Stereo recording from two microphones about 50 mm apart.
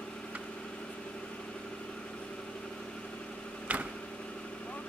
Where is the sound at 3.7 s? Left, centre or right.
Right.